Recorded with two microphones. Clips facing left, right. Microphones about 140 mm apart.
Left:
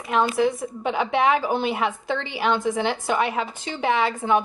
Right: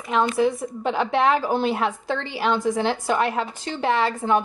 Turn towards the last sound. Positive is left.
turn(degrees=0)  # may be behind; listen again after turning